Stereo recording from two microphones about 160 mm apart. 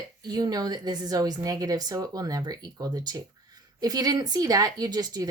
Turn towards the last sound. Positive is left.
turn(degrees=-25)  # may be behind; listen again after turning